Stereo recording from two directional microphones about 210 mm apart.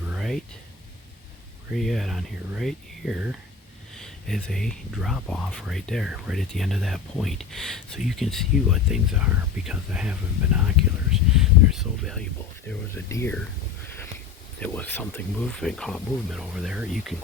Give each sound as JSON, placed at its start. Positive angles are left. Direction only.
{"t": 0.1, "sound": "a sound", "side_deg": 0}
{"t": 1.7, "sound": "speech", "side_deg": 0}
{"t": 12.6, "sound": "speech", "side_deg": 15}
{"t": 14.6, "sound": "speech", "side_deg": 10}